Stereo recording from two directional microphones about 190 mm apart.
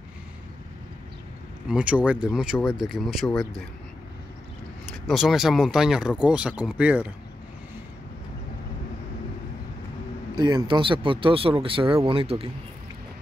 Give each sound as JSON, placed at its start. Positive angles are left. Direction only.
{"t": 1.7, "sound": "speech", "side_deg": -5}
{"t": 5.0, "sound": "speech", "side_deg": 0}
{"t": 10.3, "sound": "speech", "side_deg": -25}